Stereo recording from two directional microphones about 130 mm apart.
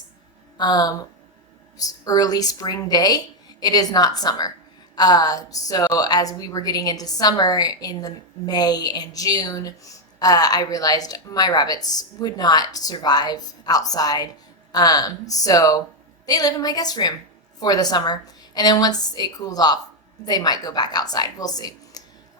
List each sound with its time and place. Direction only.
0.5 s a woman's voice: 35° left (ahead or behind)